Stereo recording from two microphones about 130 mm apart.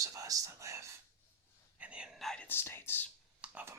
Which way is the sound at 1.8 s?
10° right (ahead or behind).